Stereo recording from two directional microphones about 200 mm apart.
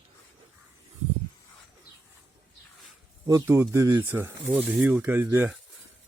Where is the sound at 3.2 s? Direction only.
15° right (ahead or behind).